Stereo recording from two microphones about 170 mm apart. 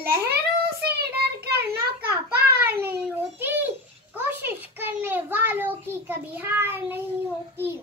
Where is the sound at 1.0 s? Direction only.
70° right (ahead or behind).